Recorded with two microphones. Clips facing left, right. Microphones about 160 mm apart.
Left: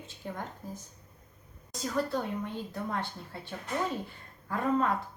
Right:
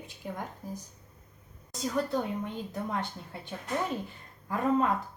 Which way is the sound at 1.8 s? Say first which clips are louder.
Right 1 dB; 20° right (ahead or behind).